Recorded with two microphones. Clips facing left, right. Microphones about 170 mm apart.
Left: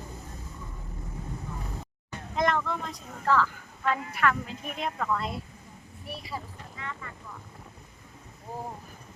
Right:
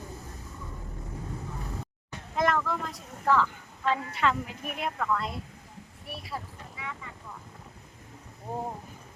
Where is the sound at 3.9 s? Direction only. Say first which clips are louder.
Even; 25° right (ahead or behind).